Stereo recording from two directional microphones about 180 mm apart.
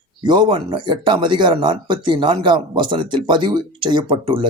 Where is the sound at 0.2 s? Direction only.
25° right (ahead or behind).